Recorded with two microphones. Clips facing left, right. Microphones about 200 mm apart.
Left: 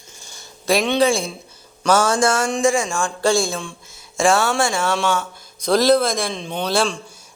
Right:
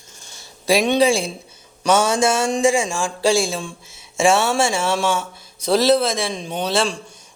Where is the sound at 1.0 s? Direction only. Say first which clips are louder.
Right 1 dB; 30° right (ahead or behind).